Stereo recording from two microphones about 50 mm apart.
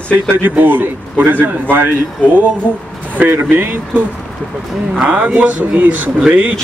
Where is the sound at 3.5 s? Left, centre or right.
Right.